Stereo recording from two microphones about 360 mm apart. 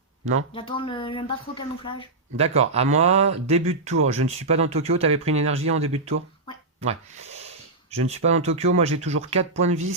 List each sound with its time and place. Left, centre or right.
0.5 s speech: centre
2.4 s speech: centre